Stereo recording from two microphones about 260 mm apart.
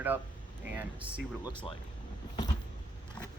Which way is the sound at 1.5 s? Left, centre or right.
Centre.